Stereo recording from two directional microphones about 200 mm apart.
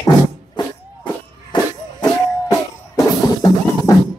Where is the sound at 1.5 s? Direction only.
20° left (ahead or behind).